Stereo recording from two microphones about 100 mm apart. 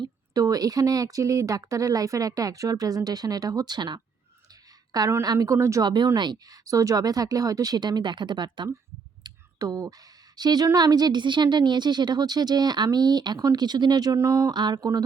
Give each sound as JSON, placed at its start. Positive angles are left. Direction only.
{"t": 0.0, "sound": "a woman's voice", "side_deg": -40}
{"t": 5.8, "sound": "a woman's voice", "side_deg": -50}
{"t": 9.2, "sound": "clicking", "side_deg": -40}
{"t": 10.3, "sound": "a woman's voice", "side_deg": -45}
{"t": 14.2, "sound": "speech", "side_deg": -30}
{"t": 14.5, "sound": "a woman's voice", "side_deg": -45}